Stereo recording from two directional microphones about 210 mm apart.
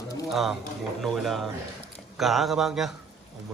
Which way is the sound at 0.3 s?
Centre (ahead or behind).